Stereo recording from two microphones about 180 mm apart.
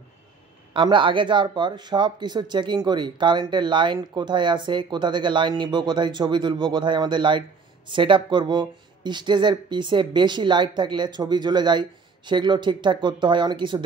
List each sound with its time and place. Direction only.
0.7 s speech: 25° right (ahead or behind)